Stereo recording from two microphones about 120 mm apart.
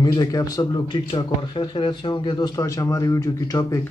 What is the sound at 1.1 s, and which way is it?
A man's voice, 40° left (ahead or behind).